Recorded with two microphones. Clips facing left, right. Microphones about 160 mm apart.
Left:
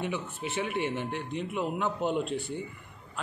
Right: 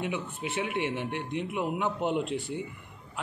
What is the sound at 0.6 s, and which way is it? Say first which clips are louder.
Speech: even; 15° right (ahead or behind).